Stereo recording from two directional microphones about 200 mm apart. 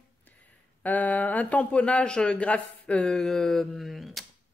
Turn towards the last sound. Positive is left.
turn(degrees=0)  # may be behind; listen again after turning